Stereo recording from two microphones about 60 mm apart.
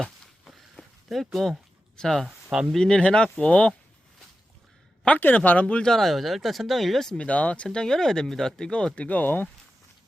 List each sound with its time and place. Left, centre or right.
0.0 s a sound: centre
2.0 s speech: centre
2.2 s speech: centre
2.7 s speech: centre
5.0 s speech: left
5.9 s speech: centre
7.2 s speech: left
9.0 s speech: left